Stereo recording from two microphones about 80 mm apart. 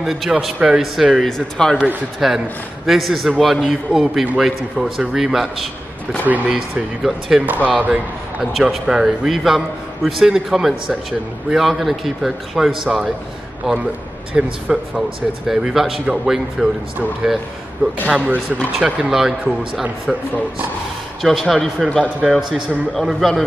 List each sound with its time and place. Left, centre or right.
0.0 s a man's voice: centre
1.1 s a man's voice: centre
6.2 s speech: centre
6.5 s a man's voice: centre
7.6 s a man's voice: centre
18.0 s speech: centre
21.2 s a man's voice: centre